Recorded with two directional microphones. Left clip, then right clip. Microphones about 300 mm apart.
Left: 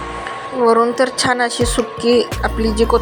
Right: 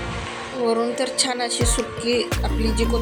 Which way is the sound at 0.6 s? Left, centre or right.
Centre.